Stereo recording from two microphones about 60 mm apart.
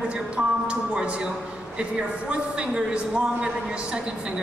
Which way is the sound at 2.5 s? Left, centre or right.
Centre.